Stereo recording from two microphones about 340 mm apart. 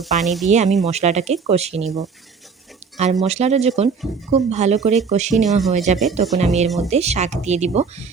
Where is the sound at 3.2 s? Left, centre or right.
Centre.